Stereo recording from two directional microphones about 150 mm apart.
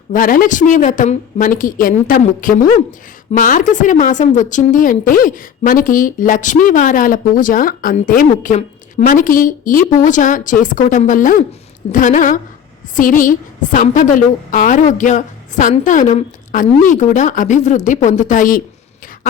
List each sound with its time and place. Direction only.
0.1 s a woman's voice: 65° left (ahead or behind)